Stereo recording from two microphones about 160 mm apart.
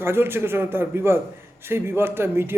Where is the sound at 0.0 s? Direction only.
15° right (ahead or behind).